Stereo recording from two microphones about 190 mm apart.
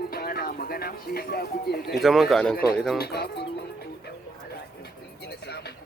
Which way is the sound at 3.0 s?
55° left (ahead or behind).